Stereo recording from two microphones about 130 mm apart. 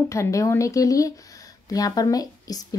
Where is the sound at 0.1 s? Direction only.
25° left (ahead or behind).